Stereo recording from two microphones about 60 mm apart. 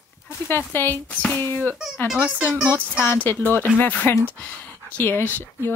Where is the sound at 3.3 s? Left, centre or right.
Left.